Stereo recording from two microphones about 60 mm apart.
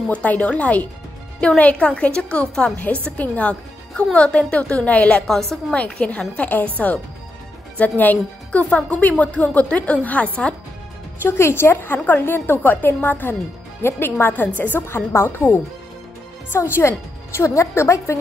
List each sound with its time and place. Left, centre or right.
0.1 s a woman's voice: left
5.2 s a woman's voice: centre
5.9 s a woman's voice: centre
7.8 s a woman's voice: left
11.2 s a woman's voice: left
17.4 s a woman's voice: left